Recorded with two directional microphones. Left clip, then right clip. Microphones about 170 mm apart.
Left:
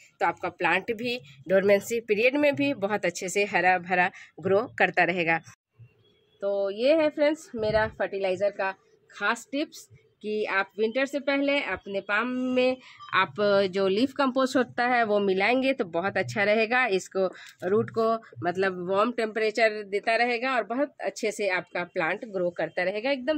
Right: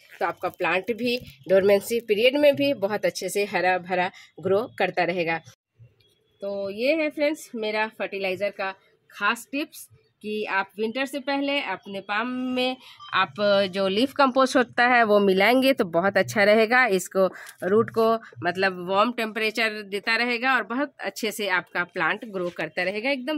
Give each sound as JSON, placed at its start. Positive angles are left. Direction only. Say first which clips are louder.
{"t": 0.2, "sound": "speech", "louder": "even", "side_deg": -50}
{"t": 4.0, "sound": "speech", "louder": "left 1 dB", "side_deg": -20}
{"t": 6.4, "sound": "speech", "louder": "left 1 dB", "side_deg": -40}
{"t": 15.0, "sound": "speech", "louder": "right 5 dB", "side_deg": -60}
{"t": 16.2, "sound": "speech", "louder": "right 5 dB", "side_deg": -45}
{"t": 17.8, "sound": "speech", "louder": "right 4 dB", "side_deg": -35}